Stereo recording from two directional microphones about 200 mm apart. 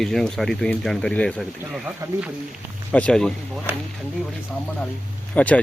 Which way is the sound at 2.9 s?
5° left (ahead or behind).